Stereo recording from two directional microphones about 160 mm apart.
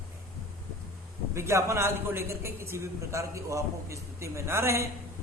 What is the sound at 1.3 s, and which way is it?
A man's voice, 15° right (ahead or behind).